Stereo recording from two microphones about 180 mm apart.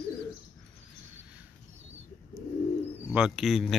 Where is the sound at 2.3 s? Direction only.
20° right (ahead or behind).